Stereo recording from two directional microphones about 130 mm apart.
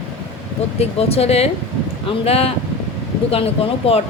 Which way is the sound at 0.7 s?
50° left (ahead or behind).